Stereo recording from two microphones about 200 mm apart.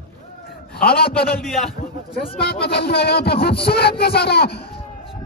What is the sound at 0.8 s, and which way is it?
Music, 50° left (ahead or behind).